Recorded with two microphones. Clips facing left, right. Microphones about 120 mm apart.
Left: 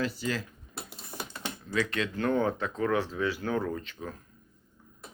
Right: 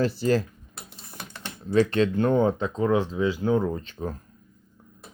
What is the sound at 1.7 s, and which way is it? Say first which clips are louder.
Speech: right 10 dB; 35° right (ahead or behind).